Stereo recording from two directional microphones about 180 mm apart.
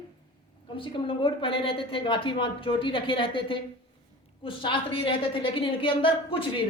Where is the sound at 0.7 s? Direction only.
30° left (ahead or behind).